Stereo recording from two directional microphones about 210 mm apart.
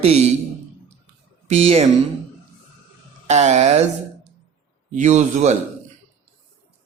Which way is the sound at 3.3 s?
35° right (ahead or behind).